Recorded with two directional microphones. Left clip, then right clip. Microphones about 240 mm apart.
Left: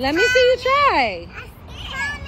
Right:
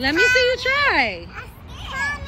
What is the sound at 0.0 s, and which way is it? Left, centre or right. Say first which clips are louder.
Children playing: left 1 dB; centre.